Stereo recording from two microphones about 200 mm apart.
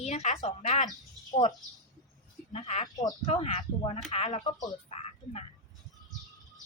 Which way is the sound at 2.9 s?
20° left (ahead or behind).